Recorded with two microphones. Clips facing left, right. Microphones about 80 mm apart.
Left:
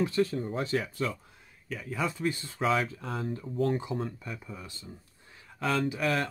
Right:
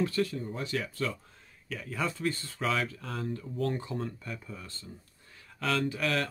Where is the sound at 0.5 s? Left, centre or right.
Left.